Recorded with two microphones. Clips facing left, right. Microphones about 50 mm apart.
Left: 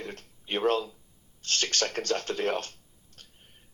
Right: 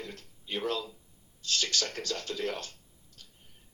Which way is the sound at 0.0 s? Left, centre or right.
Left.